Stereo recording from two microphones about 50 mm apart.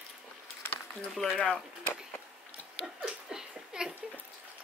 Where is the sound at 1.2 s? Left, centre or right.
Centre.